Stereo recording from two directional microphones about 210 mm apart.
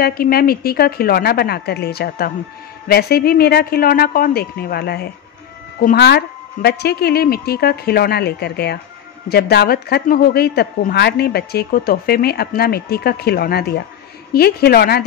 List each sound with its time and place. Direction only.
0.0 s a woman's voice: 45° left (ahead or behind)